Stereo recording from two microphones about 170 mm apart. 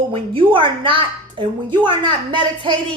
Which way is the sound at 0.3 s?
30° right (ahead or behind).